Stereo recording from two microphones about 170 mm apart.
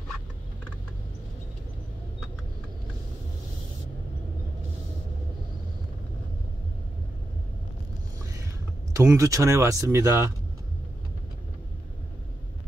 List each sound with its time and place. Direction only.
8.9 s speech: 20° right (ahead or behind)